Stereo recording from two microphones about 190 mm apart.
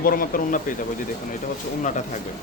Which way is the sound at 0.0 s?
50° left (ahead or behind).